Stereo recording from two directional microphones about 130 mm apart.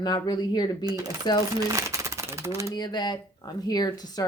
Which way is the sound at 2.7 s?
35° left (ahead or behind).